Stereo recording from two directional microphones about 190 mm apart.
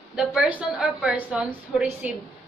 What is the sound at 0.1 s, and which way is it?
A woman's voice, 5° right (ahead or behind).